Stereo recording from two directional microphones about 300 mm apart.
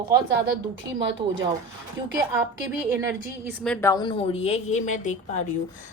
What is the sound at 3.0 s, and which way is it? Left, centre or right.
A woman's voice, centre.